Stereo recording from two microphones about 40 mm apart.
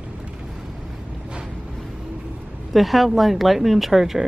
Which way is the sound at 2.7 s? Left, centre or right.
Centre.